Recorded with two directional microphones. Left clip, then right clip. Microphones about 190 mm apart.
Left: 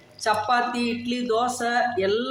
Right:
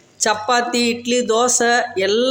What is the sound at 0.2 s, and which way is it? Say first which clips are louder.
Speech: right 5 dB; 50° right (ahead or behind).